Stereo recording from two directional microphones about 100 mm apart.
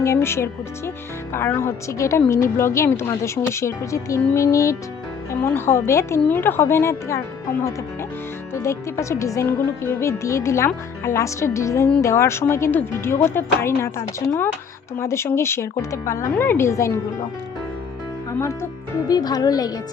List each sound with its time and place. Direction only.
0.0 s a woman's voice: 25° left (ahead or behind)
8.5 s speech: 30° left (ahead or behind)
18.3 s speech: 25° left (ahead or behind)
19.0 s a woman's voice: 40° left (ahead or behind)